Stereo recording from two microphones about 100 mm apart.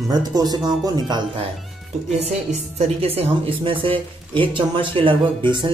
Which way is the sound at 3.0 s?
70° right (ahead or behind).